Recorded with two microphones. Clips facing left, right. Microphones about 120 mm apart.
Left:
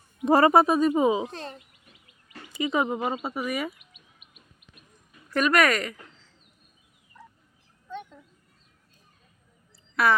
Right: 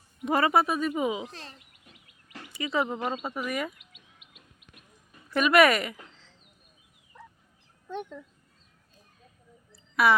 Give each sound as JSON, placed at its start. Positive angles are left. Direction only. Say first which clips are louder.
{"t": 0.3, "sound": "speech", "louder": "left 6 dB", "side_deg": 35}
{"t": 2.6, "sound": "speech", "louder": "left 3 dB", "side_deg": 20}
{"t": 5.3, "sound": "speech", "louder": "right 2 dB", "side_deg": -5}
{"t": 7.9, "sound": "speech", "louder": "right 3 dB", "side_deg": -60}
{"t": 9.9, "sound": "speech", "louder": "even", "side_deg": -5}